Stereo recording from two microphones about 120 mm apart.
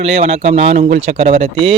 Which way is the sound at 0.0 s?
60° right (ahead or behind).